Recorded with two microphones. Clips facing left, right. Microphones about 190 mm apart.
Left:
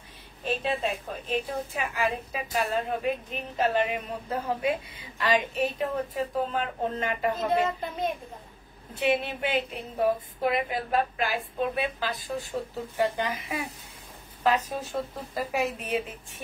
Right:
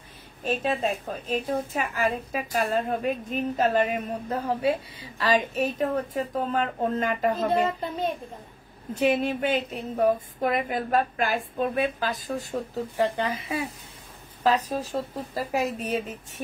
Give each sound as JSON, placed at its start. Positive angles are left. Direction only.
{"t": 0.5, "sound": "a woman's voice", "side_deg": -45}